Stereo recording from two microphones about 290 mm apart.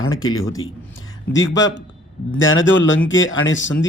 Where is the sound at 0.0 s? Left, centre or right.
Left.